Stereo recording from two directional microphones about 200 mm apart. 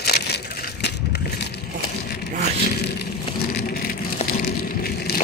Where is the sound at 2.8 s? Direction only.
55° left (ahead or behind).